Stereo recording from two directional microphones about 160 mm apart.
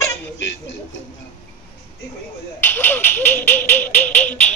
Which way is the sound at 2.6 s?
10° left (ahead or behind).